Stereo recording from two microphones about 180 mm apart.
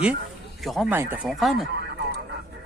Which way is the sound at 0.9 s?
10° right (ahead or behind).